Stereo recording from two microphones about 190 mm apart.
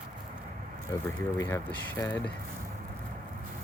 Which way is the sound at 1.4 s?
10° left (ahead or behind).